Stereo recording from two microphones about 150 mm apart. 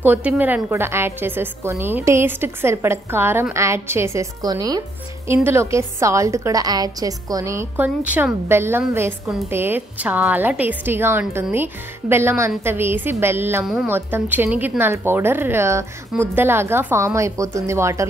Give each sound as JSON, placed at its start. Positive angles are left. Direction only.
{"t": 0.0, "sound": "a woman's voice", "side_deg": -10}